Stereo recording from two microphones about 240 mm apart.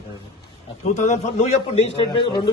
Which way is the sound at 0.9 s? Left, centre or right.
Left.